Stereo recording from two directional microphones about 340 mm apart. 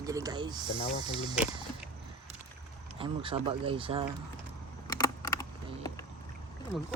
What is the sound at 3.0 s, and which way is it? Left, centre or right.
Speech, centre.